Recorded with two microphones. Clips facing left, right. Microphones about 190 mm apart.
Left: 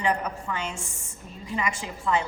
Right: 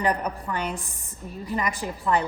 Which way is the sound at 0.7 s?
35° right (ahead or behind).